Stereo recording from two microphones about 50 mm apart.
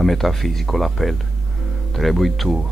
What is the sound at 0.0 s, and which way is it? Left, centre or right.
Speech, centre.